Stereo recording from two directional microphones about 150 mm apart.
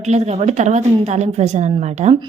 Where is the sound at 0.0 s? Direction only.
50° right (ahead or behind).